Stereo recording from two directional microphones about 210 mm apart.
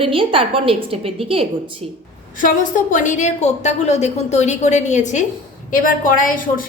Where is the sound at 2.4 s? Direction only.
40° left (ahead or behind).